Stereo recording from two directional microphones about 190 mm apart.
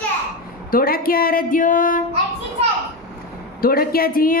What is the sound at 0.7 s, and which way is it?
A woman's voice, 50° left (ahead or behind).